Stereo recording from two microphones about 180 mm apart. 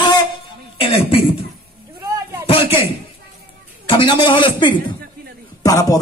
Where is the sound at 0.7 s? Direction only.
30° left (ahead or behind).